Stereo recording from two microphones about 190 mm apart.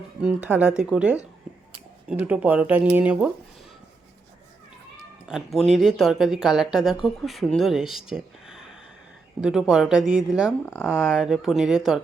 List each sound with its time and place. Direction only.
0.2 s speech: 5° right (ahead or behind)
5.3 s speech: centre (ahead or behind)
10.7 s speech: 10° left (ahead or behind)
10.9 s speech: 5° right (ahead or behind)